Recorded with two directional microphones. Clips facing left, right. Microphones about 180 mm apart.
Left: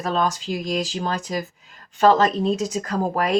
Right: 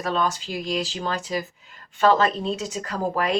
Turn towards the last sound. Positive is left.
turn(degrees=40)  # may be behind; listen again after turning